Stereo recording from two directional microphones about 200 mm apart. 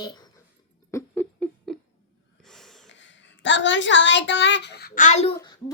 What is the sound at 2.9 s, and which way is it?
A woman's voice, 65° left (ahead or behind).